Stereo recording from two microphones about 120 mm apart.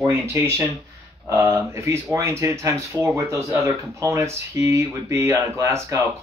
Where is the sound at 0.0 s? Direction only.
25° right (ahead or behind).